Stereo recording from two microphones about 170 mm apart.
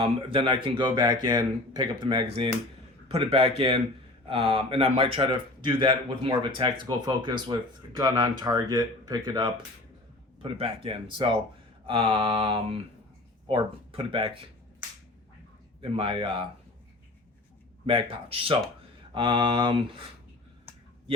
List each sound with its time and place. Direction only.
0.0 s speech: 30° right (ahead or behind)
3.1 s mantra: 35° right (ahead or behind)
4.3 s speech: 35° right (ahead or behind)
10.5 s mantra: 30° right (ahead or behind)
15.8 s mantra: 35° right (ahead or behind)
17.8 s mantra: 30° right (ahead or behind)
19.1 s speech: 30° right (ahead or behind)